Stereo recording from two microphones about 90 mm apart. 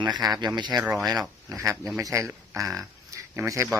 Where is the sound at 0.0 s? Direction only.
50° right (ahead or behind).